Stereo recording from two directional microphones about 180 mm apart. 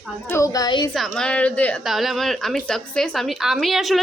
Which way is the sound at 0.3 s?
15° left (ahead or behind).